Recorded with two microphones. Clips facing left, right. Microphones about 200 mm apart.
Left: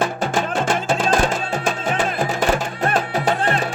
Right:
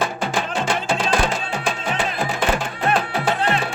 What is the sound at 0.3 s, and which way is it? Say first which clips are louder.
Music: left 3 dB; 45° left (ahead or behind).